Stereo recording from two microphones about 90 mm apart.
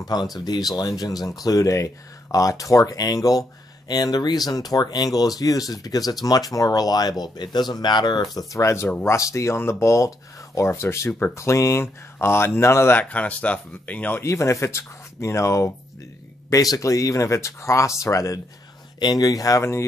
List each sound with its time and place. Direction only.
0.0 s speech: 50° left (ahead or behind)
8.5 s speech: 35° left (ahead or behind)
13.1 s speech: 15° left (ahead or behind)
14.2 s speech: 35° left (ahead or behind)
18.9 s speech: 50° left (ahead or behind); by 19.8 s 35° left (ahead or behind)